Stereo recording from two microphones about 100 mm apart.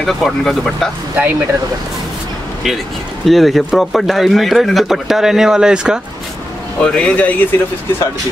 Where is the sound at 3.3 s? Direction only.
Centre (ahead or behind).